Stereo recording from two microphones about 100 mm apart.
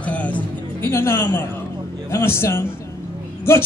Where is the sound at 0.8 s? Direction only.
25° left (ahead or behind).